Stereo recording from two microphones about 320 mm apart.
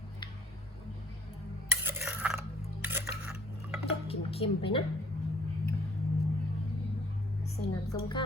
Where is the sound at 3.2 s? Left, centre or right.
Centre.